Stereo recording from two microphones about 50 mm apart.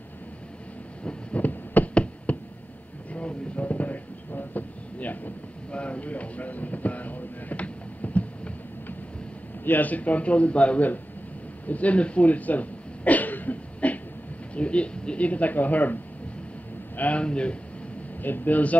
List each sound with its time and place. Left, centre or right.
1.0 s heart sounds: left
2.3 s a sound: left
9.7 s speech: left
11.6 s throat clearing: left
14.5 s a man's voice: left
17.2 s speech: left
18.2 s speech: left